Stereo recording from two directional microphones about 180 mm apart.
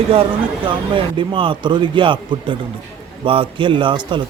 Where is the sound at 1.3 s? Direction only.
30° right (ahead or behind).